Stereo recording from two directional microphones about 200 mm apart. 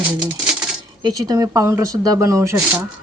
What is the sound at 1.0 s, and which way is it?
Speech, 20° right (ahead or behind).